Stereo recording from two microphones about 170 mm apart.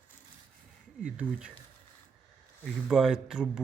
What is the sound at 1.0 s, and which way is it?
Speech, 5° right (ahead or behind).